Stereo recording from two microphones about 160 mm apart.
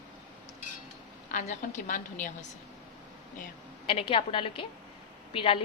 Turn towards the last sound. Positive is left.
turn(degrees=35)  # may be behind; listen again after turning